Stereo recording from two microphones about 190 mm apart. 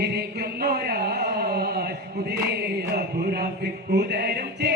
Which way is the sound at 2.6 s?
55° right (ahead or behind).